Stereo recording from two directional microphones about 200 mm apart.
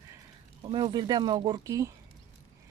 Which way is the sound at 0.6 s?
25° right (ahead or behind).